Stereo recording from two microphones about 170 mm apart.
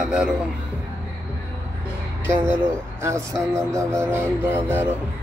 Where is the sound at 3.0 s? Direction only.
15° right (ahead or behind).